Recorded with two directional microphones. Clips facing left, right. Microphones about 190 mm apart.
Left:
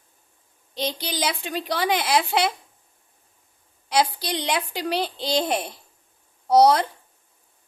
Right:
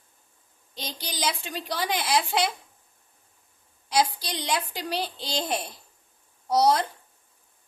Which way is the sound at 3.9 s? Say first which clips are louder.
Left 3 dB; 60° left (ahead or behind).